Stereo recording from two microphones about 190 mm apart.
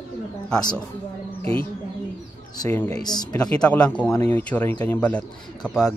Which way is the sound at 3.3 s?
5° left (ahead or behind).